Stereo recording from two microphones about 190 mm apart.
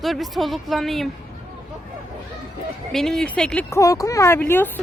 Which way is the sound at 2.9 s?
Centre (ahead or behind).